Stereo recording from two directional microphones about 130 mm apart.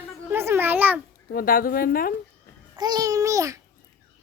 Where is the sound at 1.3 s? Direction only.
90° left.